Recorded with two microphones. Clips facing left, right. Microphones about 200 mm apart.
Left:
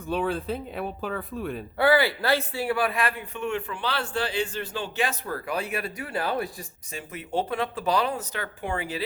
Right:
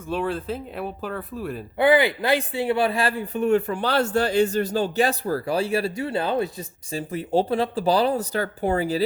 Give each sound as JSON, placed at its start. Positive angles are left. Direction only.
{"t": 0.1, "sound": "speech", "side_deg": 0}
{"t": 1.8, "sound": "a man's voice", "side_deg": -20}